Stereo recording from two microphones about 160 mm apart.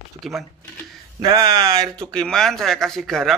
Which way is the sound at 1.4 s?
20° right (ahead or behind).